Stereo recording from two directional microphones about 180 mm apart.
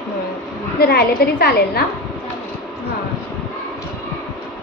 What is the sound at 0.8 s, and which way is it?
A woman's voice, 60° left (ahead or behind).